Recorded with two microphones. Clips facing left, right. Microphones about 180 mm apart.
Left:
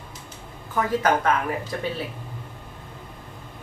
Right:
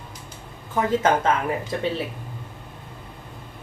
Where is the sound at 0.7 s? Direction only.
25° right (ahead or behind).